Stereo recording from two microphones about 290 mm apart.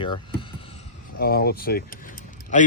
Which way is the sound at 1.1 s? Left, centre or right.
Left.